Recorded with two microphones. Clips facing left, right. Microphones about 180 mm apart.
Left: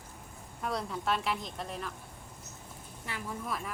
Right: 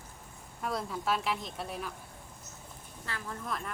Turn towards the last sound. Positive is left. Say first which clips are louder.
# left 1 dB
turn(degrees=5)  # may be behind; listen again after turning